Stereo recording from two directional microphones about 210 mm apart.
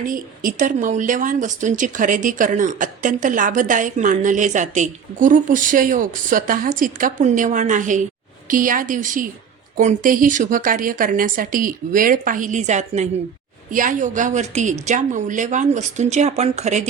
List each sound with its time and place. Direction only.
0.0 s a woman's voice: 40° right (ahead or behind)